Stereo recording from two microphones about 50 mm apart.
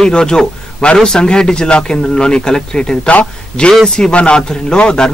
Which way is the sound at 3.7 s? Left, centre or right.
Centre.